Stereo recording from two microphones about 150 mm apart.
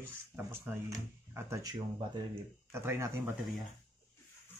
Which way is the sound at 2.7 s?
15° right (ahead or behind).